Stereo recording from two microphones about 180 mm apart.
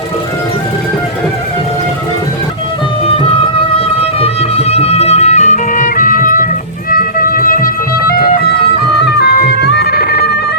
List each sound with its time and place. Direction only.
3.8 s music: 35° left (ahead or behind); by 10.3 s 60° left (ahead or behind)